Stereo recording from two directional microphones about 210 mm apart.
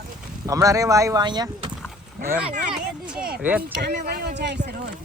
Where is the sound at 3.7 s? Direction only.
50° right (ahead or behind).